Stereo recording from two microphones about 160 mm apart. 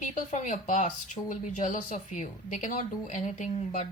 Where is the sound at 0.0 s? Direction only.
50° left (ahead or behind).